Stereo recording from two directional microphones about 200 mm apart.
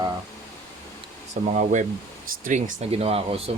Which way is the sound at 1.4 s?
35° right (ahead or behind).